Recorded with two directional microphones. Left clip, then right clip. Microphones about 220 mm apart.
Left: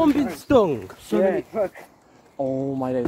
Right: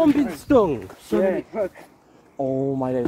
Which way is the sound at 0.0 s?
20° right (ahead or behind).